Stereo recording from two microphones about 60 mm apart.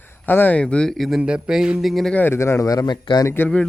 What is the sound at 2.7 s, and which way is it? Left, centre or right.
Speech, left.